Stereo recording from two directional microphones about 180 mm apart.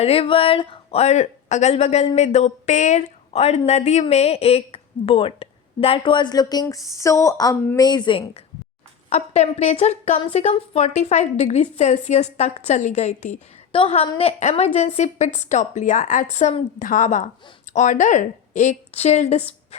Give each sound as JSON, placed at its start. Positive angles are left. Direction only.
{"t": 0.0, "sound": "a woman's voice", "side_deg": 30}
{"t": 9.0, "sound": "speech", "side_deg": 40}